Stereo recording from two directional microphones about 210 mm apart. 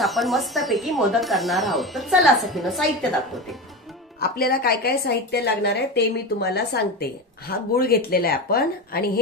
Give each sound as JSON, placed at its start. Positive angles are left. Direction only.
{"t": 0.0, "sound": "speech", "side_deg": 0}
{"t": 4.2, "sound": "a woman's voice", "side_deg": 45}